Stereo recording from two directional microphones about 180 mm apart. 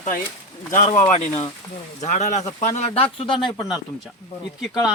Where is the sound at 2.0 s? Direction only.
40° left (ahead or behind).